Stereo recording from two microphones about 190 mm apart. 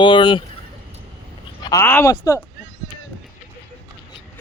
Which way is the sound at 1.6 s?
15° left (ahead or behind).